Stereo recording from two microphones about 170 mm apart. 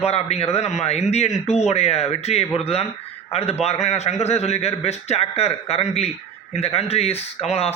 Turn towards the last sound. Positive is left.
turn(degrees=35)  # may be behind; listen again after turning